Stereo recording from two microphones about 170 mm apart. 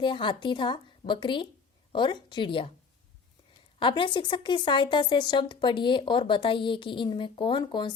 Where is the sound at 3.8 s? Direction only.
30° left (ahead or behind).